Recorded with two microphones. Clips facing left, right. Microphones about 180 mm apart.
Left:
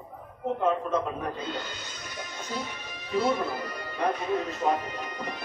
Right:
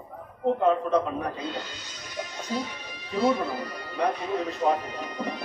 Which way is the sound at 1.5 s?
55° left (ahead or behind).